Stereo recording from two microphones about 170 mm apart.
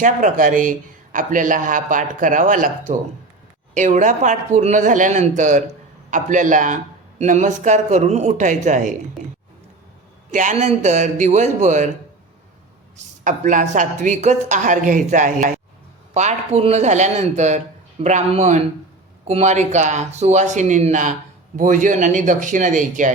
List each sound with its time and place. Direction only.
0.0 s speech: 50° right (ahead or behind)
10.3 s speech: 45° right (ahead or behind)
13.2 s speech: 45° right (ahead or behind)